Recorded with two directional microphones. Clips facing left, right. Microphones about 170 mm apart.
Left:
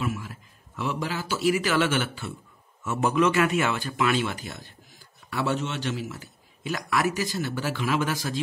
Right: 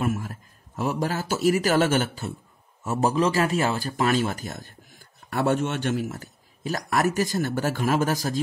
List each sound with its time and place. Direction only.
0.0 s speech: 45° right (ahead or behind)